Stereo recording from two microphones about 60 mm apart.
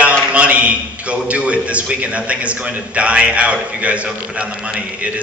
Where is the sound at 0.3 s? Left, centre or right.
Right.